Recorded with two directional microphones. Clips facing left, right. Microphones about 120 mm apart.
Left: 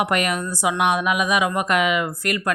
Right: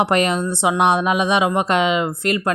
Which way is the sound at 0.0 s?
30° right (ahead or behind).